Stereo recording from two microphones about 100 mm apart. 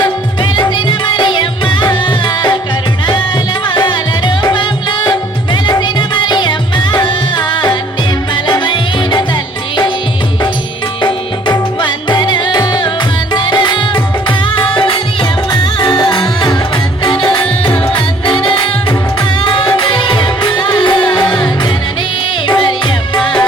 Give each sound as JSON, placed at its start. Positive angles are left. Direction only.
{"t": 0.0, "sound": "music", "side_deg": 50}
{"t": 3.7, "sound": "music", "side_deg": 50}
{"t": 11.0, "sound": "music", "side_deg": 50}
{"t": 15.8, "sound": "music", "side_deg": 45}